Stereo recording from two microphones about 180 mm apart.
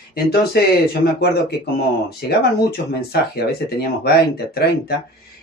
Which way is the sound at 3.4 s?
60° left (ahead or behind).